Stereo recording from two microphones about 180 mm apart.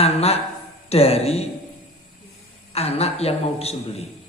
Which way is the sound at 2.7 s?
35° left (ahead or behind).